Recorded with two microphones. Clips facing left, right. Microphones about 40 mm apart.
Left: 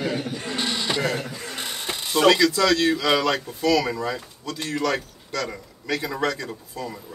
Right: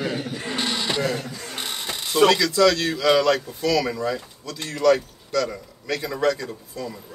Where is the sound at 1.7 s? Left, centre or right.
Left.